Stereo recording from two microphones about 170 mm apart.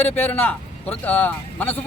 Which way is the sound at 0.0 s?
10° left (ahead or behind).